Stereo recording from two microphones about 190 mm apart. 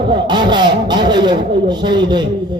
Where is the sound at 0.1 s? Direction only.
25° right (ahead or behind).